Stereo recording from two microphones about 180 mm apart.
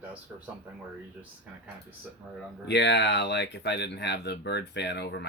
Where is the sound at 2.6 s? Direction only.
75° left (ahead or behind).